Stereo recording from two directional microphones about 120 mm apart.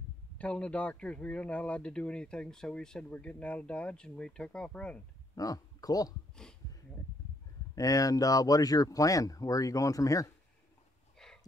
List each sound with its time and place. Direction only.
0.4 s speech: 10° left (ahead or behind)
5.3 s speech: 30° left (ahead or behind)
7.7 s speech: 30° left (ahead or behind)
11.2 s a sound: 5° left (ahead or behind)